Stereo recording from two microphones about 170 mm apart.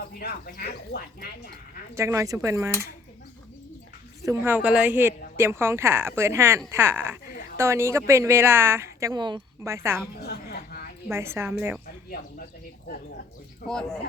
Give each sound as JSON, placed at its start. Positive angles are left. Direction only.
{"t": 0.1, "sound": "speech", "side_deg": 60}
{"t": 2.0, "sound": "a woman's voice", "side_deg": -15}
{"t": 4.2, "sound": "a woman's voice", "side_deg": -15}
{"t": 9.7, "sound": "a woman's voice", "side_deg": -15}
{"t": 10.2, "sound": "a sound", "side_deg": 65}
{"t": 11.1, "sound": "a woman's voice", "side_deg": -15}
{"t": 12.9, "sound": "speech", "side_deg": 60}
{"t": 13.7, "sound": "speech", "side_deg": 5}